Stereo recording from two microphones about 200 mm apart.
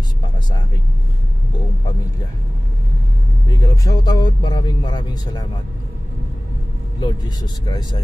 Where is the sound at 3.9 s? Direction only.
20° left (ahead or behind).